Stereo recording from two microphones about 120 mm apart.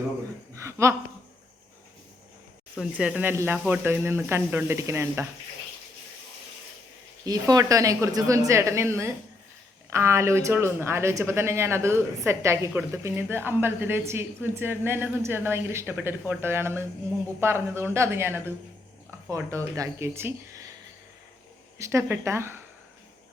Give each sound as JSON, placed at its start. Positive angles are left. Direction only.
{"t": 0.5, "sound": "a sound", "side_deg": -25}
{"t": 3.0, "sound": "speech", "side_deg": -10}
{"t": 7.3, "sound": "speech", "side_deg": -30}
{"t": 21.8, "sound": "speech", "side_deg": -25}